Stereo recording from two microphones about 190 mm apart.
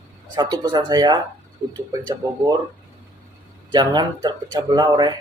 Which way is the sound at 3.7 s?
20° right (ahead or behind).